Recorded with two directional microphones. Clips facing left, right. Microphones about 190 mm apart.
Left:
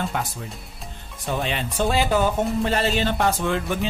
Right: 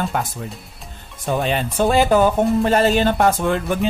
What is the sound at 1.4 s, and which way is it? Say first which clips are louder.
Speech: right 5 dB; 45° right (ahead or behind).